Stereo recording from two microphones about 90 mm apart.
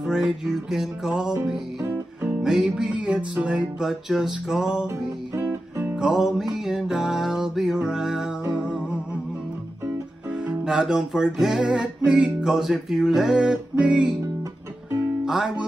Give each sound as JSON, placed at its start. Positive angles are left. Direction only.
{"t": 0.0, "sound": "music", "side_deg": -10}
{"t": 5.3, "sound": "music", "side_deg": -25}
{"t": 5.9, "sound": "music", "side_deg": -5}
{"t": 10.4, "sound": "music", "side_deg": -10}
{"t": 15.2, "sound": "music", "side_deg": -10}